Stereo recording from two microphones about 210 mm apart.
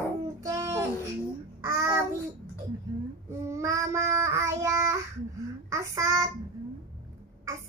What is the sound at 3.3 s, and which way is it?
Child singing, 15° right (ahead or behind).